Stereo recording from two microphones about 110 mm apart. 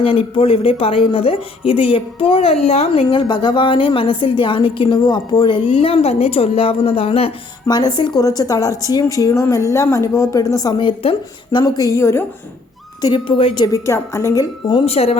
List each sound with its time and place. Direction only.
0.0 s speech: 55° left (ahead or behind)
3.1 s a woman's voice: 45° left (ahead or behind); by 7.3 s 60° left (ahead or behind)
7.7 s speech: 40° left (ahead or behind)
11.5 s a woman's voice: 30° left (ahead or behind)
13.0 s speech: 35° left (ahead or behind)
13.2 s a woman's voice: 50° left (ahead or behind)
13.7 s a woman's voice: 25° left (ahead or behind)
14.7 s speech: 60° left (ahead or behind)